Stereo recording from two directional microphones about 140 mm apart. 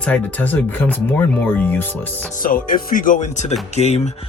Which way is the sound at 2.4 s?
85° left.